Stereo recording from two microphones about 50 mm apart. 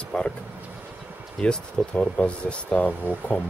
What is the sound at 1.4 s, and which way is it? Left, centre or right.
Speech, centre.